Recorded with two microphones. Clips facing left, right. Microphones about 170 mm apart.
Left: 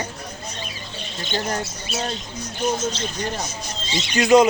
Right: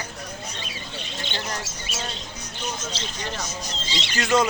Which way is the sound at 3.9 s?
20° left (ahead or behind).